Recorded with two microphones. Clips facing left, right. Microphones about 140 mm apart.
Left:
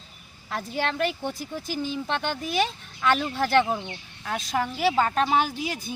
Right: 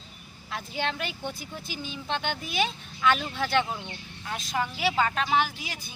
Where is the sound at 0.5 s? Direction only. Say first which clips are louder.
Left 3 dB; 40° left (ahead or behind).